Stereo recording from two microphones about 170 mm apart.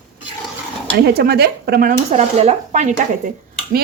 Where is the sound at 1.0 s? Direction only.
70° right (ahead or behind).